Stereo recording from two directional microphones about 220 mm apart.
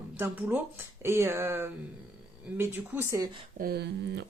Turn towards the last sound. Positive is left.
turn(degrees=-50)  # may be behind; listen again after turning